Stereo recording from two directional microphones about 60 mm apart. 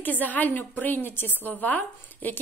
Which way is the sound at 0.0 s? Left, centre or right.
Left.